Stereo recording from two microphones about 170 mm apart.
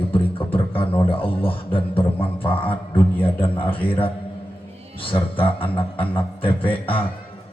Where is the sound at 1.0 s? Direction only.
30° left (ahead or behind).